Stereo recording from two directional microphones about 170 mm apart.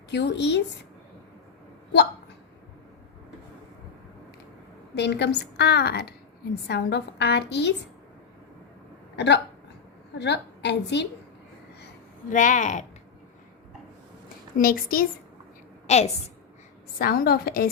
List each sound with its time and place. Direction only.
0.1 s a woman's voice: 85° left
4.9 s a woman's voice: 90° left; by 6.1 s 70° left (ahead or behind)
6.7 s a woman's voice: 85° left
9.1 s a woman's voice: 90° left
12.3 s speech: 50° left (ahead or behind)
14.6 s a woman's voice: 60° left (ahead or behind)
15.9 s a woman's voice: 40° left (ahead or behind)
17.0 s a woman's voice: 60° left (ahead or behind)